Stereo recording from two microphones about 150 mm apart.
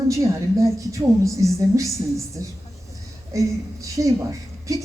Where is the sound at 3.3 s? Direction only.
20° right (ahead or behind).